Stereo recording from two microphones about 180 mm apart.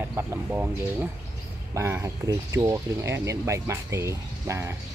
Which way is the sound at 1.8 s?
15° right (ahead or behind).